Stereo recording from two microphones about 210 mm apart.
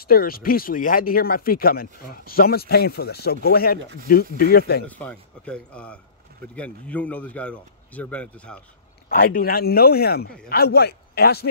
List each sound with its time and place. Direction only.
0.0 s speech: 45° left (ahead or behind)
4.8 s speech: 5° left (ahead or behind)
9.1 s speech: 45° left (ahead or behind)